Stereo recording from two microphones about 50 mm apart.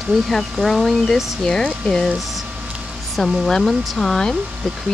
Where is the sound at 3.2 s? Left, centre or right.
Centre.